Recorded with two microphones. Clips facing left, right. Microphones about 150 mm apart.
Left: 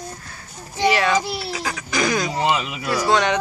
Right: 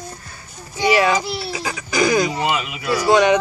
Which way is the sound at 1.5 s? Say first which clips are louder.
Right 2 dB; 5° right (ahead or behind).